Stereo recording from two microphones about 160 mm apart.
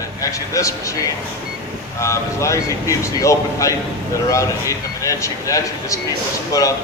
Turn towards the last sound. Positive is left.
turn(degrees=20)  # may be behind; listen again after turning